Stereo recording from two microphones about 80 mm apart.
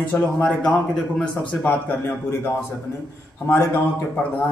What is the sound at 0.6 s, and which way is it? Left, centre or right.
A man's voice, centre.